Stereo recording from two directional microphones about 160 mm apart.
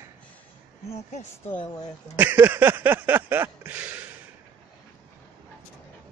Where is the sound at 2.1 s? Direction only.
10° right (ahead or behind).